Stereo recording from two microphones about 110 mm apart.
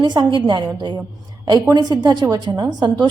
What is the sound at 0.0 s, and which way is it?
A woman's voice, 40° right (ahead or behind).